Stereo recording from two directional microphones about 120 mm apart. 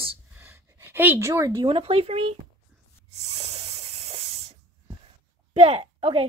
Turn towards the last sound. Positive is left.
turn(degrees=-55)  # may be behind; listen again after turning